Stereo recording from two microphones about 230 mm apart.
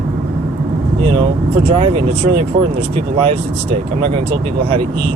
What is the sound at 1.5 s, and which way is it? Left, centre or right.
Speech, right.